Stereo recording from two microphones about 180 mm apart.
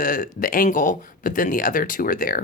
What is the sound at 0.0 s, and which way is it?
Speech, 50° left (ahead or behind).